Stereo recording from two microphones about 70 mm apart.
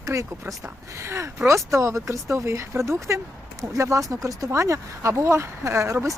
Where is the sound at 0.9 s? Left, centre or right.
Right.